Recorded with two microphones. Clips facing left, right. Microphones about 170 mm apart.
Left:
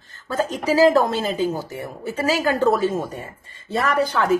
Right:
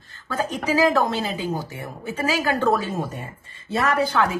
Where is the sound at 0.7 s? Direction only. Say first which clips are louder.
Left 4 dB; 40° left (ahead or behind).